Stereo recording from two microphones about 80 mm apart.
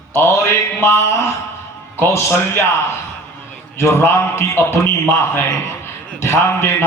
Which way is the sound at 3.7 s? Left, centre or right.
Left.